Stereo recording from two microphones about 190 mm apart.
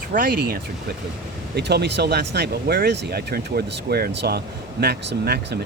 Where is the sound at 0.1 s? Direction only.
50° right (ahead or behind).